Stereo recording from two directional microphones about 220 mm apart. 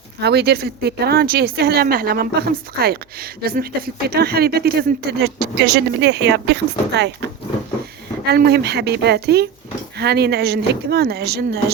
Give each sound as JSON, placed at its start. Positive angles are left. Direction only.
{"t": 0.2, "sound": "speech", "side_deg": -45}
{"t": 8.3, "sound": "speech", "side_deg": -50}